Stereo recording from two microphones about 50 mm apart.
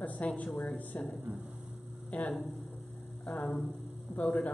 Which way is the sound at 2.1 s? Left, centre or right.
Left.